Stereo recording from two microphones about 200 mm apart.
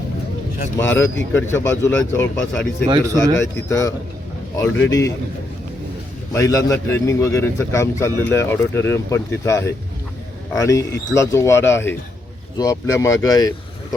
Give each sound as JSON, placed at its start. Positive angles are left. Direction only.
{"t": 0.8, "sound": "a man's voice", "side_deg": 10}
{"t": 6.3, "sound": "a man's voice", "side_deg": 15}